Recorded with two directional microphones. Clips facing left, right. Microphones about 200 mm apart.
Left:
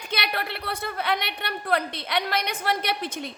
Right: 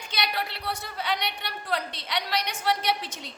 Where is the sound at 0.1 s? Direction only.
60° left (ahead or behind).